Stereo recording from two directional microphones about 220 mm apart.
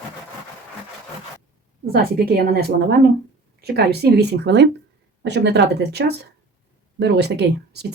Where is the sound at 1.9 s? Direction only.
45° right (ahead or behind).